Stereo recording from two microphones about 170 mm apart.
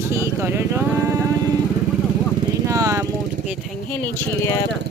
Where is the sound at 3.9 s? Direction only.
15° left (ahead or behind).